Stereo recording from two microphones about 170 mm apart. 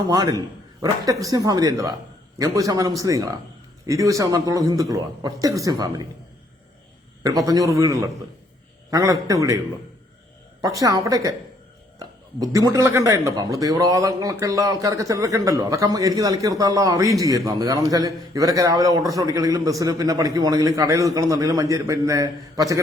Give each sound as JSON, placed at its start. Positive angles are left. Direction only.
{"t": 0.1, "sound": "speech", "side_deg": -20}
{"t": 7.2, "sound": "speech", "side_deg": -20}
{"t": 10.6, "sound": "speech", "side_deg": -20}